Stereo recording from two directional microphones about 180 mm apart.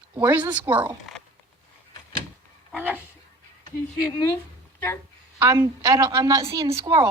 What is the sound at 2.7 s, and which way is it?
Speech, 10° right (ahead or behind).